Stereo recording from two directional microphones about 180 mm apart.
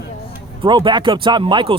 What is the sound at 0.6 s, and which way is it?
Speech, 25° right (ahead or behind).